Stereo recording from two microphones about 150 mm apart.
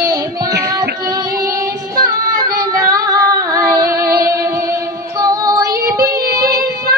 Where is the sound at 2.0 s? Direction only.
25° right (ahead or behind).